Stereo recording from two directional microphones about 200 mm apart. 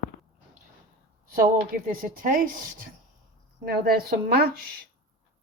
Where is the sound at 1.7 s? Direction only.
45° right (ahead or behind).